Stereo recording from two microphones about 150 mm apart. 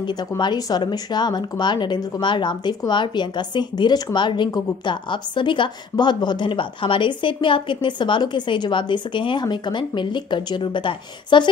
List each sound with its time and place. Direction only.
0.0 s speech: 30° left (ahead or behind)